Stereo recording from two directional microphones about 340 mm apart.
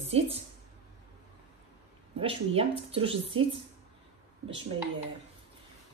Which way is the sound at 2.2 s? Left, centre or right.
Centre.